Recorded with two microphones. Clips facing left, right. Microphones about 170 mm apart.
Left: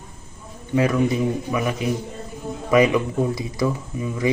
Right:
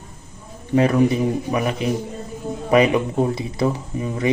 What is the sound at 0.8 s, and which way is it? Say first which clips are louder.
Speech: right 3 dB; 30° right (ahead or behind).